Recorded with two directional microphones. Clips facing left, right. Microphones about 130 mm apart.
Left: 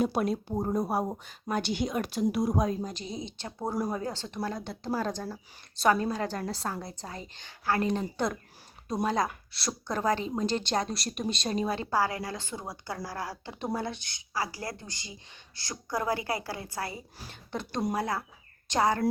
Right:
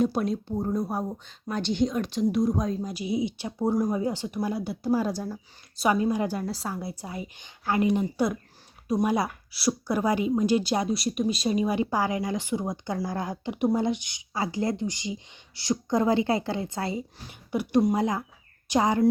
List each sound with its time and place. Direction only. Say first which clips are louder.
0.0 s a woman's voice: right 2 dB; 5° left (ahead or behind); by 8.0 s 15° right (ahead or behind)
9.0 s speech: right 2 dB; 10° right (ahead or behind)
17.5 s speech: right 8 dB; 10° right (ahead or behind)